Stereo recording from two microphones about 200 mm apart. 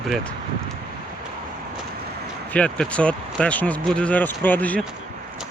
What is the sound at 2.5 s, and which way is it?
Speech, 5° left (ahead or behind).